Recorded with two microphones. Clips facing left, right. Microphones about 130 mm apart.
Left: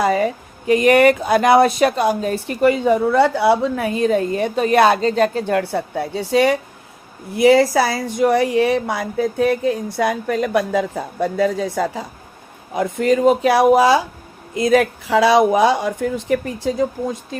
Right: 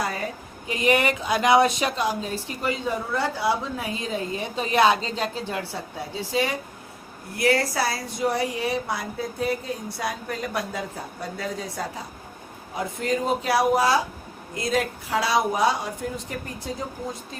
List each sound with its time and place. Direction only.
0.0 s speech: 90° left
0.7 s speech: 55° left (ahead or behind)
7.4 s a woman's voice: 90° left